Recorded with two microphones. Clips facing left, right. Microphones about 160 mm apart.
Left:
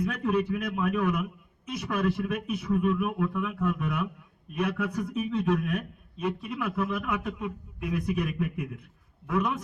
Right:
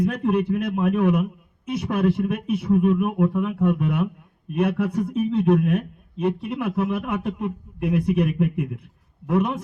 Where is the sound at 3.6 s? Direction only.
30° right (ahead or behind).